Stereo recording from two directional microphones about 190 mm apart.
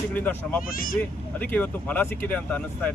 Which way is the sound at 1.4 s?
10° left (ahead or behind).